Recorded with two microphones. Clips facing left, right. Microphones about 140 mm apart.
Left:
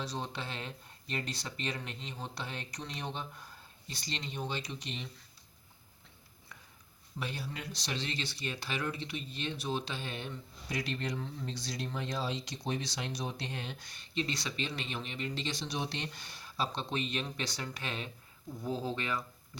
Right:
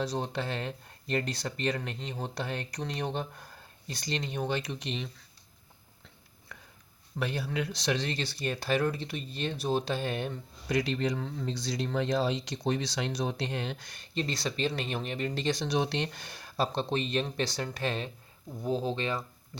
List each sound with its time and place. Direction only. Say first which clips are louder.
0.0 s speech: right 7 dB; 45° right (ahead or behind); by 5.0 s 75° right (ahead or behind)
7.2 s speech: right 8 dB; 65° right (ahead or behind)
7.9 s speech: right 5 dB; 45° right (ahead or behind)
10.7 s speech: right 7 dB; 90° right
13.9 s speech: even; 40° right (ahead or behind)
15.6 s speech: right 8 dB; 70° right (ahead or behind); by 18.1 s 40° right (ahead or behind)
18.6 s speech: right 5 dB; 20° right (ahead or behind)